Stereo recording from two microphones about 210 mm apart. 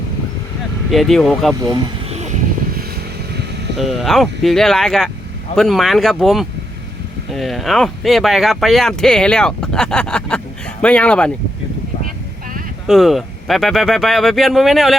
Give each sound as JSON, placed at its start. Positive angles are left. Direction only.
{"t": 0.9, "sound": "speech", "side_deg": 0}
{"t": 2.0, "sound": "vehicle", "side_deg": -30}
{"t": 3.8, "sound": "speech", "side_deg": 0}
{"t": 12.9, "sound": "speech", "side_deg": 0}